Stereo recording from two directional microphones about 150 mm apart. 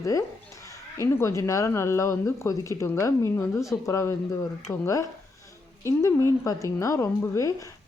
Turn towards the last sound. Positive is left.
turn(degrees=20)  # may be behind; listen again after turning